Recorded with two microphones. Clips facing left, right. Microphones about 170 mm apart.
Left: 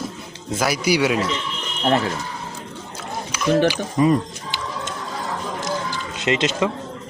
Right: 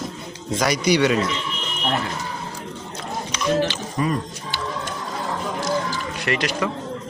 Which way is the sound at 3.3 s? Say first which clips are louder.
Left 2 dB; 10° left (ahead or behind).